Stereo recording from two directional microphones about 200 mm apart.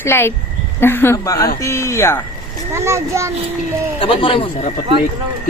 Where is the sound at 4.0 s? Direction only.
25° left (ahead or behind).